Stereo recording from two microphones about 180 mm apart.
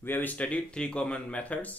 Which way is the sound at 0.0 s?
10° left (ahead or behind).